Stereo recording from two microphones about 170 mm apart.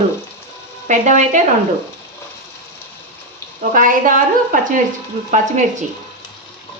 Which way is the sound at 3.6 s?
50° right (ahead or behind).